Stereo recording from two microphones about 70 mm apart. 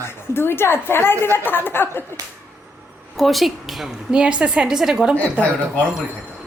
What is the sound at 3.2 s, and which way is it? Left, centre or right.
Speech, centre.